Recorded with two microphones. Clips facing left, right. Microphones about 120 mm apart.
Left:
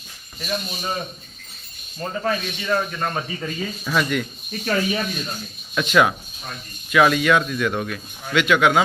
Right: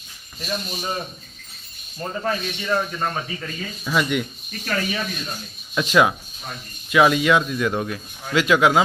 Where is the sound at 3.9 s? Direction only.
15° right (ahead or behind).